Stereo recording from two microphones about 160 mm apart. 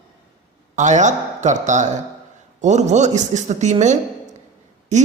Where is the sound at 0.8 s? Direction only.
50° right (ahead or behind).